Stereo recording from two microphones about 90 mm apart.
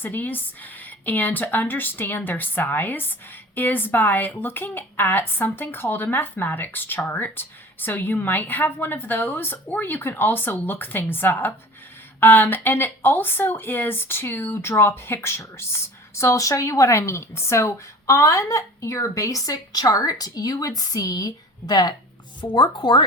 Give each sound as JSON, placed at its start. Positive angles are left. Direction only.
{"t": 0.0, "sound": "a woman's voice", "side_deg": 20}
{"t": 22.4, "sound": "speech", "side_deg": 60}